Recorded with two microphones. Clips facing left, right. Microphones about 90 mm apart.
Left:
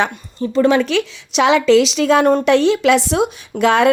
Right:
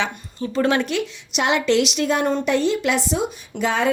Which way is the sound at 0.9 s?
90° left.